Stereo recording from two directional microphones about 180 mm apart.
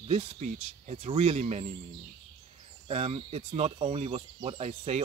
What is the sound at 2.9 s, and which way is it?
Speech, 35° right (ahead or behind).